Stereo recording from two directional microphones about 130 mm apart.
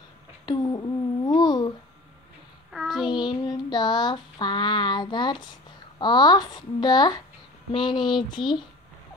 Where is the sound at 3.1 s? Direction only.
35° left (ahead or behind).